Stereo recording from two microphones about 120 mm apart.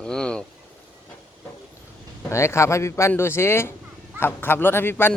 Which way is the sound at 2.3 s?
25° left (ahead or behind).